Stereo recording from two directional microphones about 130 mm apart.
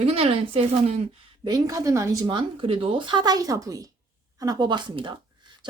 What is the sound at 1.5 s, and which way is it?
Speech, 30° right (ahead or behind).